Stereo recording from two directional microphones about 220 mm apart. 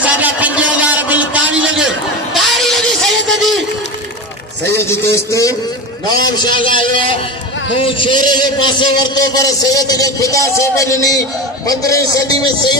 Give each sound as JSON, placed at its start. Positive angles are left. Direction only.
{"t": 0.0, "sound": "a sound", "side_deg": -5}
{"t": 2.5, "sound": "music", "side_deg": 0}
{"t": 4.7, "sound": "a man's voice", "side_deg": 10}